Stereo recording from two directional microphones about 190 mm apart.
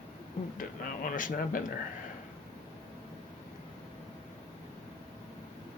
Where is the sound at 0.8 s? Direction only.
45° left (ahead or behind).